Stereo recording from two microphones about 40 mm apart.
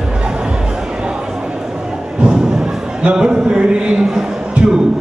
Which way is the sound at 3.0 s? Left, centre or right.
Right.